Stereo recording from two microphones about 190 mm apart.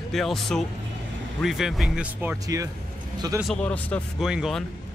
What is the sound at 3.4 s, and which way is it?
Speech, 5° left (ahead or behind).